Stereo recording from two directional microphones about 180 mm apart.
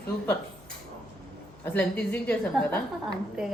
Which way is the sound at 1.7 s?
10° left (ahead or behind).